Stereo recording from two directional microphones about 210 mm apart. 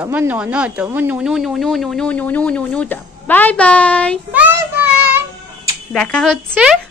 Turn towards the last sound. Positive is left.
turn(degrees=0)  # may be behind; listen again after turning